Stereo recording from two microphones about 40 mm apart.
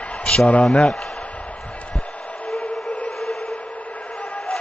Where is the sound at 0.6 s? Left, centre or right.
Left.